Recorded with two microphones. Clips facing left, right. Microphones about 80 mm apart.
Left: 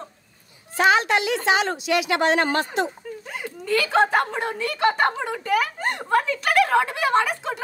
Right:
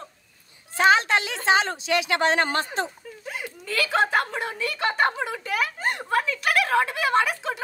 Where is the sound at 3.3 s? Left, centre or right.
Centre.